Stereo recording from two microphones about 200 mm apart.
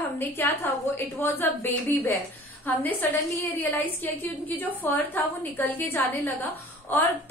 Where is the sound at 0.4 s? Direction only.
10° left (ahead or behind).